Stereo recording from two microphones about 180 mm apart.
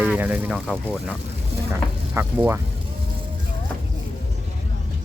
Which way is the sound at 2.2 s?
10° right (ahead or behind).